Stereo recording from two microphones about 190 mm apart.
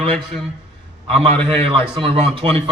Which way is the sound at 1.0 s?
30° right (ahead or behind).